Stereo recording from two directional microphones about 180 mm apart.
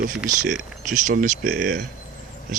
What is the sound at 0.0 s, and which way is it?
Speech, 5° right (ahead or behind).